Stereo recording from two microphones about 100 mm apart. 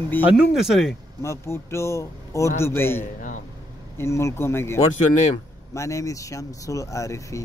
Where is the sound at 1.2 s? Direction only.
30° left (ahead or behind).